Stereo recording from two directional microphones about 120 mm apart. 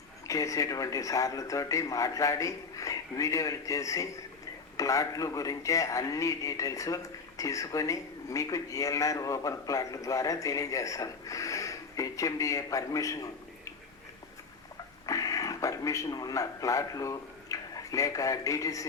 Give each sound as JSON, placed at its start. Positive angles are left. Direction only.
{"t": 0.3, "sound": "a man's voice", "side_deg": 25}
{"t": 15.0, "sound": "speech", "side_deg": 30}